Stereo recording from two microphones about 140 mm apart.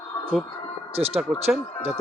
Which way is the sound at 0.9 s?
45° right (ahead or behind).